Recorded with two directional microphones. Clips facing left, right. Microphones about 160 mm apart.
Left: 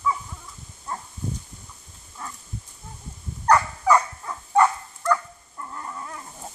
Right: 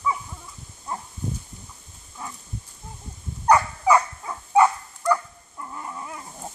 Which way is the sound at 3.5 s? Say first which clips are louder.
Right 1 dB; 10° right (ahead or behind).